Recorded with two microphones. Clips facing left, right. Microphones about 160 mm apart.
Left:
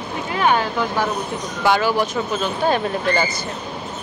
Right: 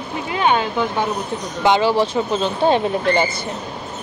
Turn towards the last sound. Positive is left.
turn(degrees=-25)  # may be behind; listen again after turning